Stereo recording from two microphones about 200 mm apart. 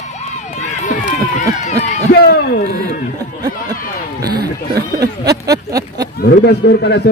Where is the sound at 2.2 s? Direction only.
50° left (ahead or behind).